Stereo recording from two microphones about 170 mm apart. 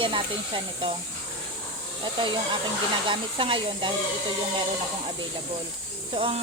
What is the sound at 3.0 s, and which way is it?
Speech, 30° right (ahead or behind).